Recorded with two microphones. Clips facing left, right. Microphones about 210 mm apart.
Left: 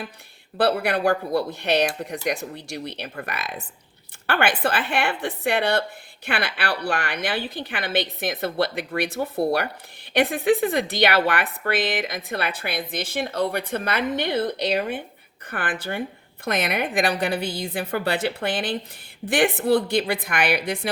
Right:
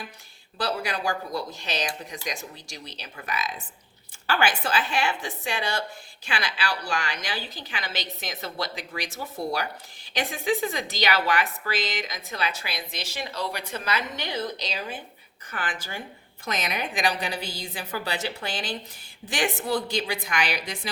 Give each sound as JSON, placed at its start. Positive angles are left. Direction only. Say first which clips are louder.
{"t": 0.5, "sound": "a woman's voice", "louder": "left 8 dB", "side_deg": 60}